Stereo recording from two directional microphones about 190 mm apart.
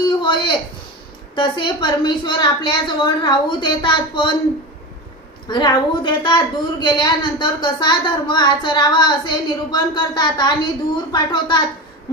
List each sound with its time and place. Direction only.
0.2 s a sound: 25° left (ahead or behind)
1.4 s a woman's voice: 25° left (ahead or behind)
5.5 s a woman's voice: 25° left (ahead or behind)